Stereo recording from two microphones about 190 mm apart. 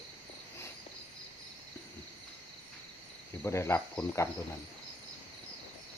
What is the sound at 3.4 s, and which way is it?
Speech, 15° left (ahead or behind).